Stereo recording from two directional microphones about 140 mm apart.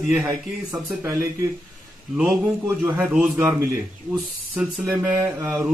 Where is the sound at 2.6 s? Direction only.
15° right (ahead or behind).